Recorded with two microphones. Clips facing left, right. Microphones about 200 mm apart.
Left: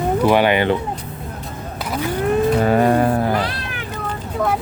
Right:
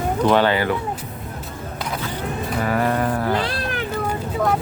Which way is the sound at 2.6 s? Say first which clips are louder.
Left 5 dB; 25° left (ahead or behind).